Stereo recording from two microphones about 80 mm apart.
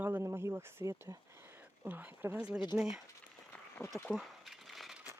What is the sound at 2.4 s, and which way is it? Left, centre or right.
Speech, centre.